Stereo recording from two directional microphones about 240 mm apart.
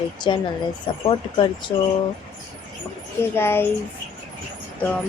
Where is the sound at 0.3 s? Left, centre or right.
Left.